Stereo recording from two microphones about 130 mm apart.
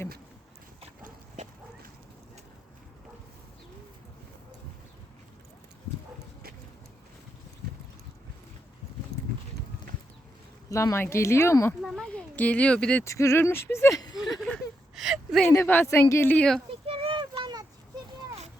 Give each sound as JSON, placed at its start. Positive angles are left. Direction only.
{"t": 10.7, "sound": "speech", "side_deg": 25}
{"t": 11.8, "sound": "a child's voice", "side_deg": 0}
{"t": 12.1, "sound": "speech", "side_deg": 10}
{"t": 13.1, "sound": "speech", "side_deg": 25}
{"t": 14.9, "sound": "a sound", "side_deg": -5}
{"t": 15.4, "sound": "speech", "side_deg": 15}
{"t": 16.8, "sound": "a sound", "side_deg": -45}